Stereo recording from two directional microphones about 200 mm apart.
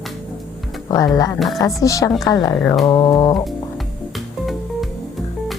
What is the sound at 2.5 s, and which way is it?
Speech, 5° left (ahead or behind).